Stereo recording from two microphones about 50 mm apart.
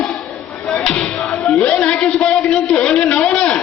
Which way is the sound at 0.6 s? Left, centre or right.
Left.